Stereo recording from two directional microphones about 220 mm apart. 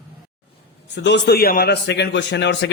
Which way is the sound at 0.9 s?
55° left (ahead or behind).